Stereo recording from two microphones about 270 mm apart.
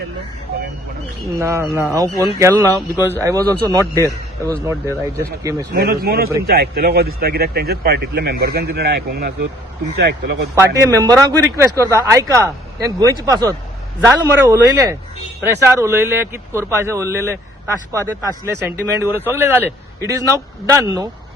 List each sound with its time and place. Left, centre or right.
1.4 s speech: centre
5.7 s speech: right
10.8 s speech: centre